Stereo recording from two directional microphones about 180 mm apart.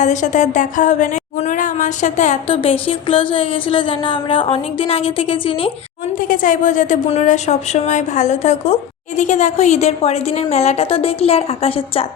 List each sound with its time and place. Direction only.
0.0 s speech: 40° left (ahead or behind)
2.8 s speech: 30° left (ahead or behind)
6.1 s a woman's voice: 50° left (ahead or behind)